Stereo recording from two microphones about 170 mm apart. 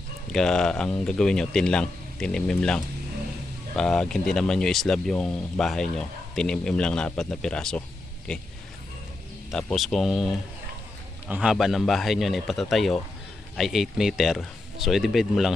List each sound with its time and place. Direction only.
0.3 s speech: 5° left (ahead or behind)
9.5 s speech: 5° left (ahead or behind)